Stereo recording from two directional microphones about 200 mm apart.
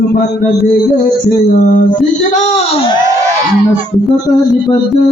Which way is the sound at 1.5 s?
40° left (ahead or behind).